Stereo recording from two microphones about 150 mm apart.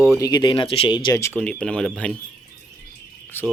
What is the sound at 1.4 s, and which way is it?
Speech, 5° left (ahead or behind).